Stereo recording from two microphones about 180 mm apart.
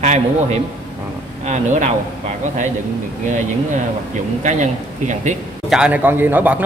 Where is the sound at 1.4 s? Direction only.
40° right (ahead or behind).